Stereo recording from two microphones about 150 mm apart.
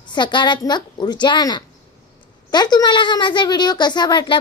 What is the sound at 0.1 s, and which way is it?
A woman's voice, 30° left (ahead or behind).